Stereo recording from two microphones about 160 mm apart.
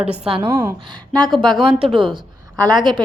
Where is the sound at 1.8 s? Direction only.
30° right (ahead or behind).